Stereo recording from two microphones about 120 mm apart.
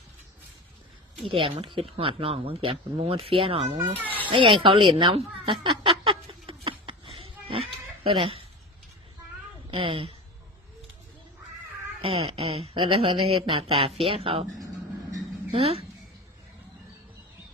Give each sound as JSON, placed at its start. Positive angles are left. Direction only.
{"t": 1.2, "sound": "speech", "side_deg": -45}
{"t": 4.3, "sound": "a sound", "side_deg": -45}
{"t": 9.7, "sound": "speech", "side_deg": -45}
{"t": 12.0, "sound": "speech", "side_deg": -50}
{"t": 15.5, "sound": "speech", "side_deg": -55}